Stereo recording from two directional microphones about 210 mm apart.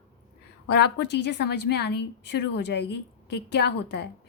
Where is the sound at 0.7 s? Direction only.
55° left (ahead or behind).